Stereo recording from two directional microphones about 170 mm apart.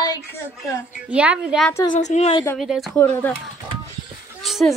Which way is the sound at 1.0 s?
5° right (ahead or behind).